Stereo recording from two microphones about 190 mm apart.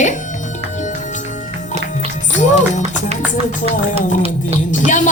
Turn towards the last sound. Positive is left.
turn(degrees=40)  # may be behind; listen again after turning